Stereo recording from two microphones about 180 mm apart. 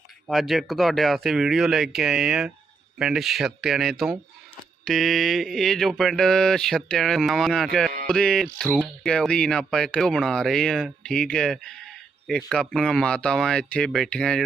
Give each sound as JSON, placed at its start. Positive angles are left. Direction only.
{"t": 0.3, "sound": "speech", "side_deg": 0}